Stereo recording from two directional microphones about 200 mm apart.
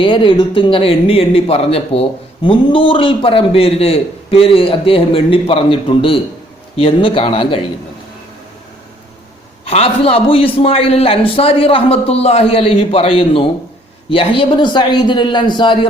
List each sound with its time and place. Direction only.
0.0 s speech: 25° left (ahead or behind)
9.6 s speech: 30° left (ahead or behind)